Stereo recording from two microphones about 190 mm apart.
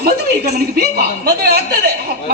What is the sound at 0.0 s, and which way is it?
Speech, 60° right (ahead or behind).